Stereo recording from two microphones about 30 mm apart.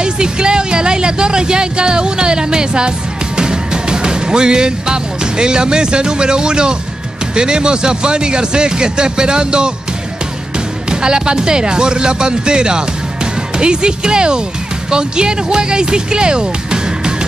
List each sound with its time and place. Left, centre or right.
0.0 s speech: right
10.9 s speech: right